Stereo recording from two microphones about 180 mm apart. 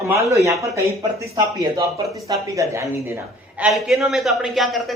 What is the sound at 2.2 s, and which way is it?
Speech, 20° right (ahead or behind).